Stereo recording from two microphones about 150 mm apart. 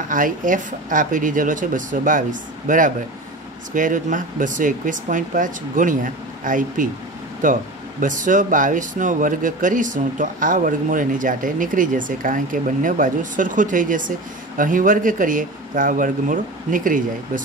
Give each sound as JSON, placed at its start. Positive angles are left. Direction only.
{"t": 0.1, "sound": "speech", "side_deg": -60}